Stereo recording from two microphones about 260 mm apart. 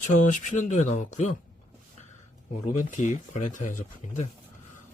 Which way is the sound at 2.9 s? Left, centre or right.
Left.